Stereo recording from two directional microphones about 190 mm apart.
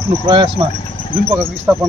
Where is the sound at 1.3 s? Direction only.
10° right (ahead or behind).